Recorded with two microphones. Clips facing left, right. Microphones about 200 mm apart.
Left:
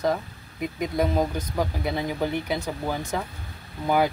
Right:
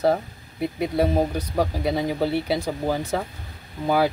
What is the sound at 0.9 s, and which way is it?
Speech, 35° right (ahead or behind).